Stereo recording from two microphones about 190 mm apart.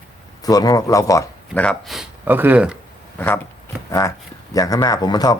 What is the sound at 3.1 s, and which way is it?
Speech, 10° left (ahead or behind).